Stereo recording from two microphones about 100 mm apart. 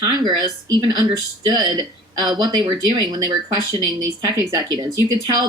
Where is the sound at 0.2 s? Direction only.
45° right (ahead or behind).